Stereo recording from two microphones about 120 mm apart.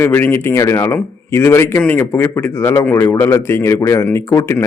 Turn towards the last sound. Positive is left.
turn(degrees=25)  # may be behind; listen again after turning